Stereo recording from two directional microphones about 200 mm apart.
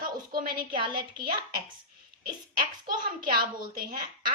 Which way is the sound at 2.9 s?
45° right (ahead or behind).